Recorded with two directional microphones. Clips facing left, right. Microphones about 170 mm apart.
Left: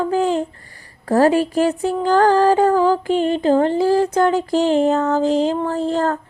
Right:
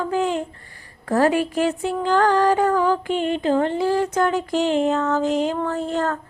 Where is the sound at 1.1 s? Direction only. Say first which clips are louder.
Left 4 dB; 35° left (ahead or behind).